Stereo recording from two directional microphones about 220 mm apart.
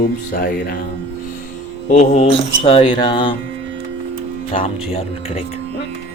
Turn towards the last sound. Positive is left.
turn(degrees=30)  # may be behind; listen again after turning